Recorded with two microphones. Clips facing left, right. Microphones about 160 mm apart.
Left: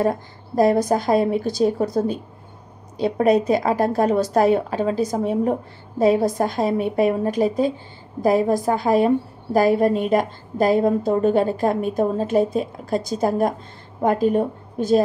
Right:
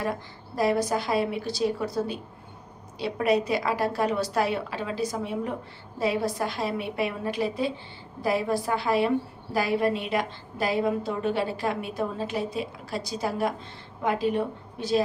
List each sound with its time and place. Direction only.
0.0 s a woman's voice: 45° left (ahead or behind)